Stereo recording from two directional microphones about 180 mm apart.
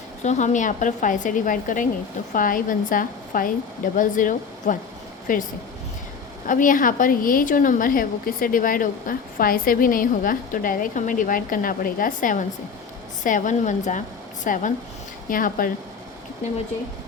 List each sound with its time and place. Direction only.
0.2 s a woman's voice: 40° left (ahead or behind)
6.5 s a woman's voice: 50° left (ahead or behind)